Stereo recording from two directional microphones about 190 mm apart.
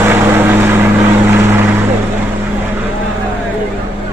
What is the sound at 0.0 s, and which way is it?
Vehicle, 10° right (ahead or behind).